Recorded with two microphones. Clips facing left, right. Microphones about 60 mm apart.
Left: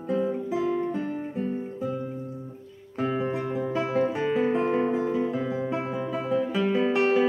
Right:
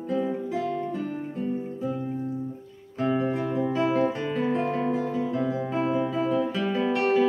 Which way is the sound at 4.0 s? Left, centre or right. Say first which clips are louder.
Left 1 dB; left.